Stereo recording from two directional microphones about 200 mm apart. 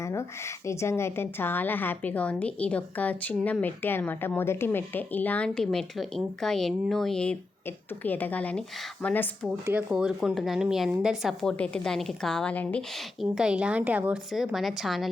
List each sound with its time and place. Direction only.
0.0 s a sound: 15° left (ahead or behind)
0.7 s a woman's voice: 15° left (ahead or behind)
9.5 s speech: 10° right (ahead or behind)
13.3 s speech: 5° right (ahead or behind)